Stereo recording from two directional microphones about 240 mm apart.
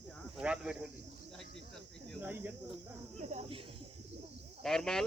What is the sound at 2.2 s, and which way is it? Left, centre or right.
Cricket, centre.